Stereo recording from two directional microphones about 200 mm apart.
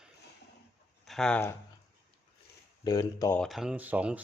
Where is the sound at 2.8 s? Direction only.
20° left (ahead or behind).